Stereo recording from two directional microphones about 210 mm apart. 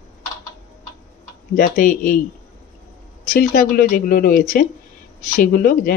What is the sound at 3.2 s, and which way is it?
Speech, 40° left (ahead or behind).